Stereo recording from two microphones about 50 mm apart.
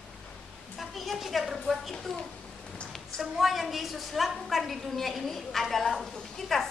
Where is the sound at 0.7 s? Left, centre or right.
Centre.